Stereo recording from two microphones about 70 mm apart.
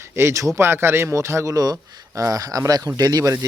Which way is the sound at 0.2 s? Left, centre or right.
Right.